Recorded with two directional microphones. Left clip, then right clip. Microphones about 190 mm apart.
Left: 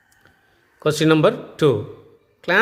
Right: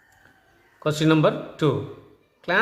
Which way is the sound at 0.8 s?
45° left (ahead or behind).